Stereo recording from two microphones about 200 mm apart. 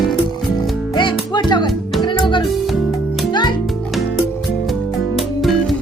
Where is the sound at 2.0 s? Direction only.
25° left (ahead or behind).